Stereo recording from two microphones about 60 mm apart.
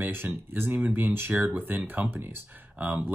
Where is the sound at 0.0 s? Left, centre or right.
Right.